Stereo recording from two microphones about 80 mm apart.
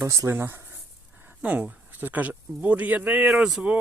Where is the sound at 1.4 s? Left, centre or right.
Centre.